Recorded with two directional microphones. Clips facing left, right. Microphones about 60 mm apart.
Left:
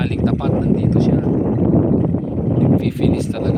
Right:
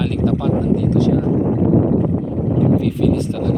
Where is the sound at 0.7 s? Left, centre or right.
Left.